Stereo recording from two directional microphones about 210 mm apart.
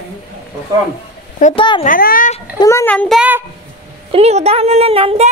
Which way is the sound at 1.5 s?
25° left (ahead or behind).